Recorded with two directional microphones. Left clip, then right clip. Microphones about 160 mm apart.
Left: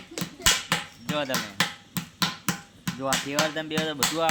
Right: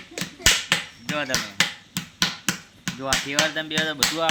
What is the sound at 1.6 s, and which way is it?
Finger snapping, 90° left.